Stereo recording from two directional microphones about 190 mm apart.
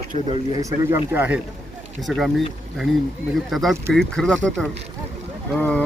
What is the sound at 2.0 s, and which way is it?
Speech, centre (ahead or behind).